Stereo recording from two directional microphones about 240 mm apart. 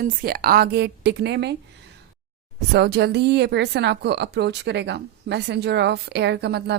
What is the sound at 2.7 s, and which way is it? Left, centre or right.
Speech, right.